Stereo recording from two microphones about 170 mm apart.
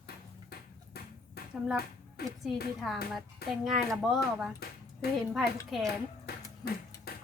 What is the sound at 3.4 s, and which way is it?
Speech, 65° left (ahead or behind).